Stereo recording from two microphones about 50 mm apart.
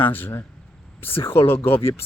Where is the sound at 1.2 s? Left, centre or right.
Left.